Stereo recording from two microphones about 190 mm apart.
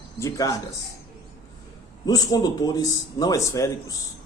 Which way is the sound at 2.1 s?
20° left (ahead or behind).